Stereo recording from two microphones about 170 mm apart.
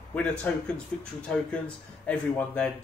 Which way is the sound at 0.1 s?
5° left (ahead or behind).